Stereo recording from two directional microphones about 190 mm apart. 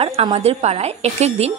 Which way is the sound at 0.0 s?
30° right (ahead or behind).